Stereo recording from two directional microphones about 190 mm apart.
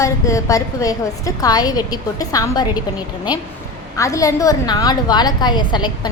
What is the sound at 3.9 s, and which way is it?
A woman's voice, 15° left (ahead or behind).